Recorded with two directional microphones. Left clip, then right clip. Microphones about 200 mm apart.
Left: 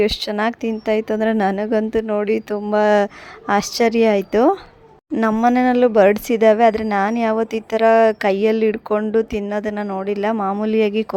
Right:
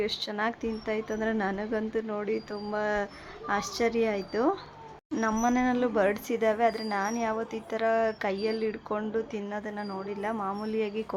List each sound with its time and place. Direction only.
0.0 s a woman's voice: 50° left (ahead or behind)